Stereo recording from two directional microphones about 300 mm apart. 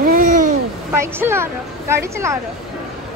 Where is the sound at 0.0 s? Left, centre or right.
Right.